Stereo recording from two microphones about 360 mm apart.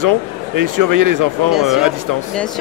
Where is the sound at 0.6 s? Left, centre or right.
Right.